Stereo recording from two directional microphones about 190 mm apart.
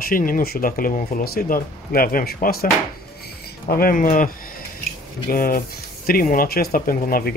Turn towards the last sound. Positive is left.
turn(degrees=50)  # may be behind; listen again after turning